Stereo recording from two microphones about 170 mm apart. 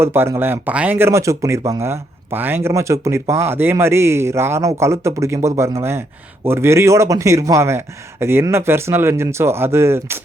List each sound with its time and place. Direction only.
0.0 s speech: 15° right (ahead or behind)